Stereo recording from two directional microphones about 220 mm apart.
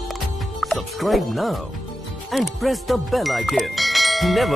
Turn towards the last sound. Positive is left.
turn(degrees=0)  # may be behind; listen again after turning